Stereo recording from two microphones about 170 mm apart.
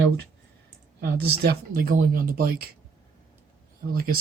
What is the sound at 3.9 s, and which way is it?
Speech, 60° right (ahead or behind).